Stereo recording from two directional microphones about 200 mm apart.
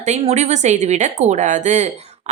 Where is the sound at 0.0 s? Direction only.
35° right (ahead or behind).